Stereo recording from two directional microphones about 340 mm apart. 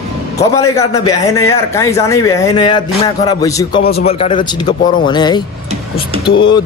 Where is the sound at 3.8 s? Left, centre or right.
Left.